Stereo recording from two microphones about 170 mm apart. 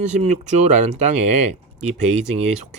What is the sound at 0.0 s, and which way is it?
Speech, 40° right (ahead or behind).